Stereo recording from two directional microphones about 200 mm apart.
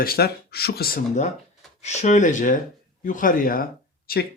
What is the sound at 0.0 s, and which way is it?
Speech, 50° left (ahead or behind).